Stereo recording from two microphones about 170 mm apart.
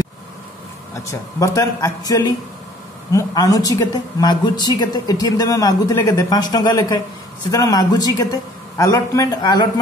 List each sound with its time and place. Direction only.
0.9 s speech: 20° left (ahead or behind)